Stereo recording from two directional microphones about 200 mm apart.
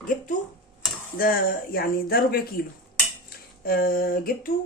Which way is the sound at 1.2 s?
45° left (ahead or behind).